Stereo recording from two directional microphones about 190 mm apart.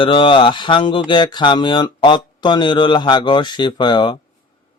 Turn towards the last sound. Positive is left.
turn(degrees=25)  # may be behind; listen again after turning